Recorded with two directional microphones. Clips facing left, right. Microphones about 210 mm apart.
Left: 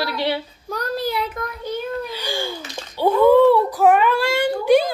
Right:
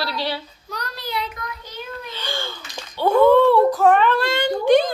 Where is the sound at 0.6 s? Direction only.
50° left (ahead or behind).